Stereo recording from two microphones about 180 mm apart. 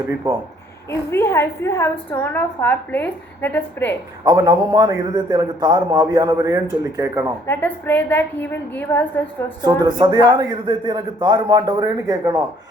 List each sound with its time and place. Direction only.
0.9 s a woman's voice: 15° left (ahead or behind)
4.2 s a man's voice: 20° right (ahead or behind)
7.4 s a woman's voice: 10° left (ahead or behind)
9.6 s a man's voice: 25° right (ahead or behind)